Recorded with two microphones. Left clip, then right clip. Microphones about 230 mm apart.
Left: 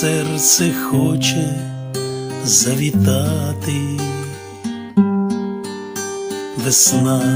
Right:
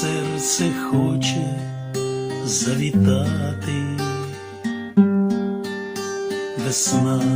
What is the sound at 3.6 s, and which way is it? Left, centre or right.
Music, left.